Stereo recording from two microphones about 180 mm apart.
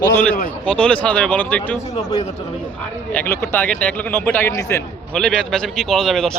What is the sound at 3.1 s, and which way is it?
A man's voice, 10° left (ahead or behind).